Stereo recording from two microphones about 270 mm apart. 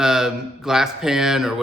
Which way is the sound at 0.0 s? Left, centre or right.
Centre.